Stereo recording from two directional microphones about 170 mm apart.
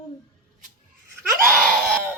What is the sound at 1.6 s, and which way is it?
Screaming, 5° left (ahead or behind).